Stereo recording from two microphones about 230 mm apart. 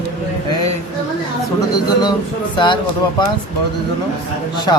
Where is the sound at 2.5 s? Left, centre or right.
Centre.